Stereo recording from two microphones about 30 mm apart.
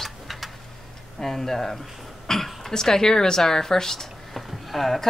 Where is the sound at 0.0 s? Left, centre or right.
Centre.